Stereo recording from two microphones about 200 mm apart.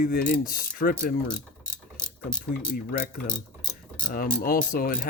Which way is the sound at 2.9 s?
45° left (ahead or behind).